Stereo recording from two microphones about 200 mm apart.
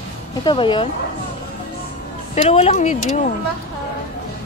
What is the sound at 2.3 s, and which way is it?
Speech, 30° left (ahead or behind).